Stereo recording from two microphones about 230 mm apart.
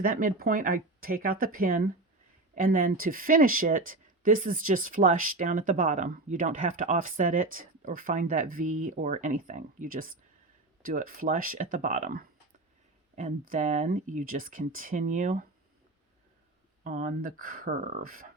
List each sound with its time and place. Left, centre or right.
0.0 s speech: right
13.5 s speech: right
16.8 s speech: right